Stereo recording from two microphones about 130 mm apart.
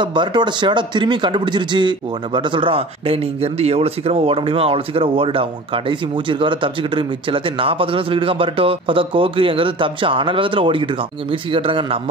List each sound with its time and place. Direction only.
0.0 s speech: 35° right (ahead or behind)